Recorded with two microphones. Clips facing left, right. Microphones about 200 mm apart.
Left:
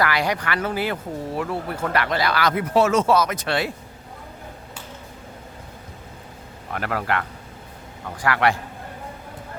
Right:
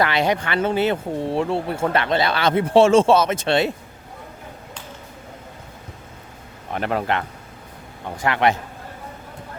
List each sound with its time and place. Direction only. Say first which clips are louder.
0.0 s speech: right 3 dB; 25° right (ahead or behind)
6.7 s speech: right 3 dB; 20° right (ahead or behind)